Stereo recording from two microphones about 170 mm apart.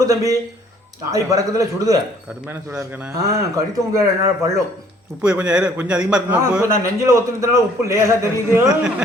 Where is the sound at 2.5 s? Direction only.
10° right (ahead or behind).